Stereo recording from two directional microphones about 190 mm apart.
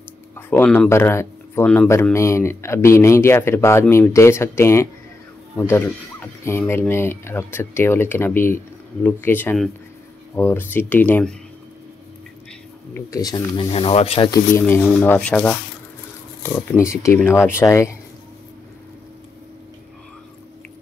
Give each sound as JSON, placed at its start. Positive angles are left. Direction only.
{"t": 0.5, "sound": "speech", "side_deg": 10}
{"t": 12.9, "sound": "speech", "side_deg": 20}
{"t": 13.7, "sound": "speech", "side_deg": 30}
{"t": 14.3, "sound": "speech", "side_deg": 15}